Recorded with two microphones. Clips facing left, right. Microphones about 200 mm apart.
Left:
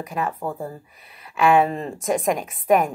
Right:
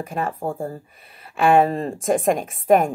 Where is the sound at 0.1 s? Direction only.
30° right (ahead or behind).